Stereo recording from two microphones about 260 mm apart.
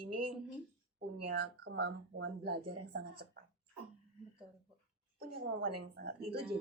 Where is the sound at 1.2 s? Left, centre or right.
Right.